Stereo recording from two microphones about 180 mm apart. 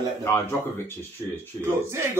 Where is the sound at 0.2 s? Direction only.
15° left (ahead or behind).